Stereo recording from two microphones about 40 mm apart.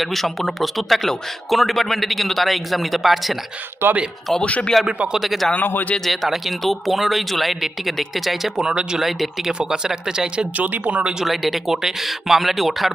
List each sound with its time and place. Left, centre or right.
0.0 s speech: centre
3.8 s speech: right
4.4 s a man's voice: left
5.1 s speech: centre
8.7 s speech: right
9.0 s speech: centre
9.5 s speech: centre
10.6 s speech: right
11.3 s speech: centre